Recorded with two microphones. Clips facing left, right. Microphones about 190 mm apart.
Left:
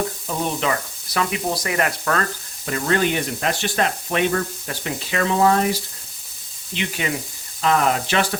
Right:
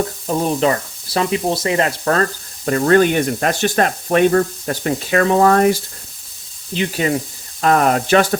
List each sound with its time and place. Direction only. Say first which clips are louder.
0.3 s speech: right 8 dB; 35° right (ahead or behind)
2.6 s speech: right 8 dB; 50° right (ahead or behind)
6.7 s speech: right 7 dB; 40° right (ahead or behind)
7.6 s speech: right 4 dB; 50° right (ahead or behind)